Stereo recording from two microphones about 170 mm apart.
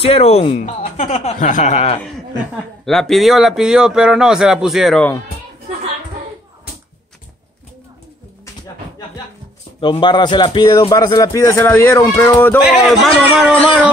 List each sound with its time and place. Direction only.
0.0 s speech: 35° left (ahead or behind)
2.8 s speech: centre (ahead or behind)
9.8 s speech: 30° left (ahead or behind); by 12.5 s 15° left (ahead or behind)
12.6 s speech: 5° right (ahead or behind)